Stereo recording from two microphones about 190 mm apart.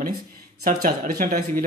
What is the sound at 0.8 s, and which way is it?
Speech, 45° right (ahead or behind).